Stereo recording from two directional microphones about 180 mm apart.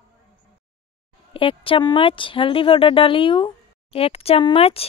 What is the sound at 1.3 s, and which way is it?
Speech, 30° left (ahead or behind).